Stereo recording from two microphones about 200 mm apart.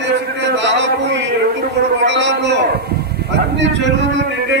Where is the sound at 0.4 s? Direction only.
60° right (ahead or behind).